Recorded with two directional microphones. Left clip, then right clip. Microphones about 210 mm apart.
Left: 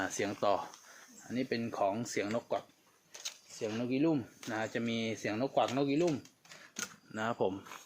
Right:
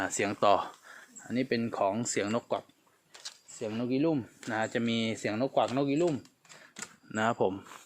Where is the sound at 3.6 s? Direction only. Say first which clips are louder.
Right 3 dB; 40° right (ahead or behind).